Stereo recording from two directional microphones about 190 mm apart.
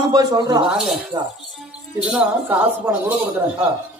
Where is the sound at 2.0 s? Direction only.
5° right (ahead or behind).